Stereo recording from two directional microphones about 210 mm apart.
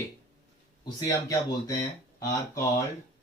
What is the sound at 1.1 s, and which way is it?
Speech, 15° left (ahead or behind).